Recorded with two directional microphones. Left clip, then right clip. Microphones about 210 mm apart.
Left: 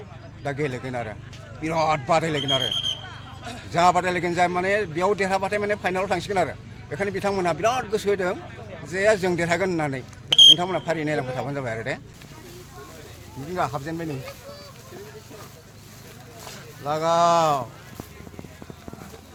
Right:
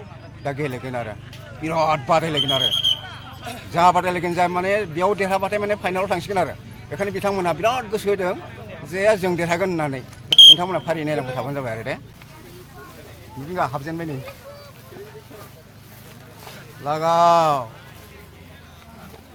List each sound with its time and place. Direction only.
0.4 s a man's voice: 10° right (ahead or behind)
10.3 s smoke detector: 50° right (ahead or behind)
10.6 s speech: 5° right (ahead or behind)
13.5 s a man's voice: 15° right (ahead or behind)
16.8 s speech: 20° right (ahead or behind)